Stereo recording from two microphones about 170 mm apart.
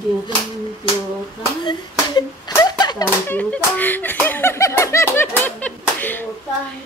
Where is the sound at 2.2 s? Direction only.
25° left (ahead or behind).